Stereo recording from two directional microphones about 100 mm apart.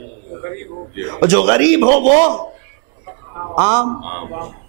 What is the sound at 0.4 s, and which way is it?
A man's voice, 20° right (ahead or behind).